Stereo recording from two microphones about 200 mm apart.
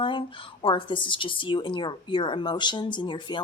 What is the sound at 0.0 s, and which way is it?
Speech, 25° left (ahead or behind).